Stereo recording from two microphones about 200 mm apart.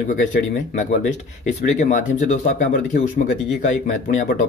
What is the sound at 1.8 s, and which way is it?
Speech, 40° left (ahead or behind).